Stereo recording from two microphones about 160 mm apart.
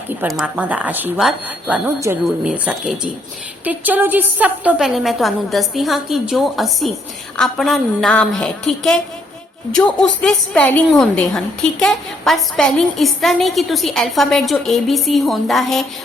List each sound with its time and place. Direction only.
0.3 s a woman's voice: 5° right (ahead or behind)